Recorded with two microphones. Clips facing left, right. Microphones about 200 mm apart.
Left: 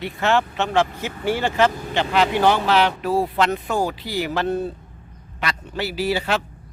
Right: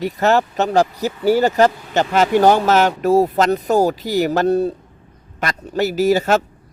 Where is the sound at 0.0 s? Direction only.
40° right (ahead or behind).